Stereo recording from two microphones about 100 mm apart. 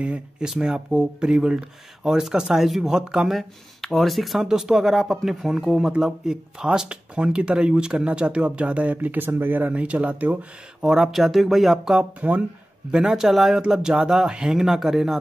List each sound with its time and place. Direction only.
0.0 s speech: 10° right (ahead or behind)